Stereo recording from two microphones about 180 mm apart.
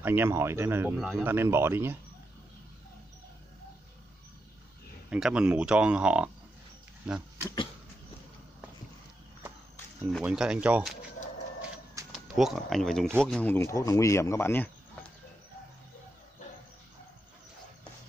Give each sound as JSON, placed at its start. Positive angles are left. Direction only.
{"t": 0.0, "sound": "speech", "side_deg": -10}
{"t": 0.9, "sound": "speech", "side_deg": 0}
{"t": 1.2, "sound": "speech", "side_deg": -15}
{"t": 5.1, "sound": "speech", "side_deg": -5}
{"t": 10.2, "sound": "speech", "side_deg": -5}
{"t": 12.1, "sound": "speech", "side_deg": 0}